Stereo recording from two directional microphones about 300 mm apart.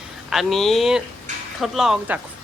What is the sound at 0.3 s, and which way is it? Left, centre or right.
Speech, centre.